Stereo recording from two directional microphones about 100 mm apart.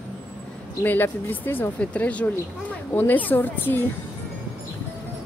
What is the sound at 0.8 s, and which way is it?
Speech, 20° left (ahead or behind).